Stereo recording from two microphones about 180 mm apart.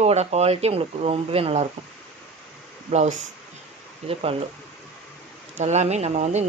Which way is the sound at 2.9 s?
40° right (ahead or behind).